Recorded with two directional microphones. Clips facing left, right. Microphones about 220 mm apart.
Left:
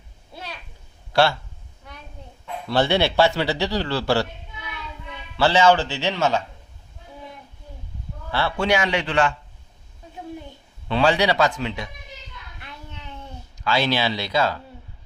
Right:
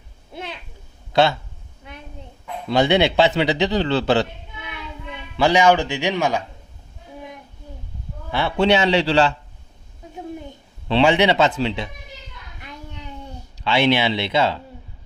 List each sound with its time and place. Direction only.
0.3 s a sound: 20° right (ahead or behind)
1.1 s speech: 20° right (ahead or behind)
2.6 s a man's voice: 20° right (ahead or behind)
8.3 s a man's voice: 20° right (ahead or behind)
10.8 s a man's voice: 30° right (ahead or behind)
13.7 s a man's voice: 25° right (ahead or behind)